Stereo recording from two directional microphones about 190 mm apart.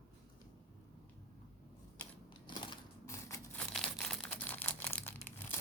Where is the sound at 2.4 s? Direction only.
25° left (ahead or behind).